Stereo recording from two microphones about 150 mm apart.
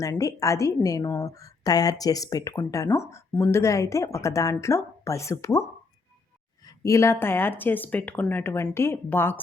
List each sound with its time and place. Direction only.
0.0 s a woman's voice: 20° left (ahead or behind)
6.7 s speech: 20° left (ahead or behind)